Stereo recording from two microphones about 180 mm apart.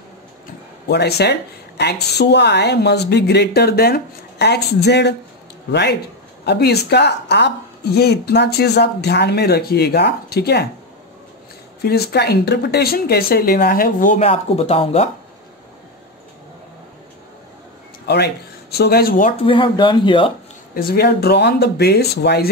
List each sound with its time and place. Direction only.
0.8 s a woman's voice: 65° left (ahead or behind)
11.8 s a woman's voice: 65° left (ahead or behind); by 15.0 s 35° left (ahead or behind)
18.0 s speech: 65° left (ahead or behind); by 19.3 s 50° left (ahead or behind)
19.4 s speech: 30° left (ahead or behind)
20.7 s a woman's voice: 55° left (ahead or behind)